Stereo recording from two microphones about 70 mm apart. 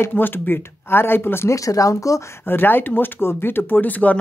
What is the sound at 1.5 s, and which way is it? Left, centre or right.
Speech, left.